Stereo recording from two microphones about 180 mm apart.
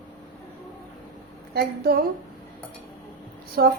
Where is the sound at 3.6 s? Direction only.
60° right (ahead or behind).